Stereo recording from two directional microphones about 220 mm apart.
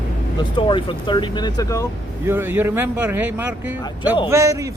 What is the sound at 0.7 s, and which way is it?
Speech, 20° left (ahead or behind).